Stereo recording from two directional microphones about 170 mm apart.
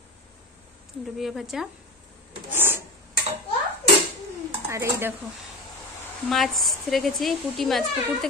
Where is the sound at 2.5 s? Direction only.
10° right (ahead or behind).